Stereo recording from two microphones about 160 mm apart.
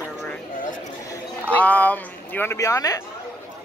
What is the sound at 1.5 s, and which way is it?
Speech, 10° left (ahead or behind).